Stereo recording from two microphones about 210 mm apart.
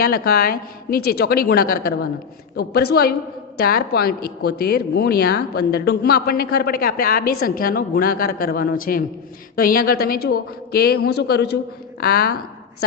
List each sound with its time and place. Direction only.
0.0 s speech: 45° left (ahead or behind)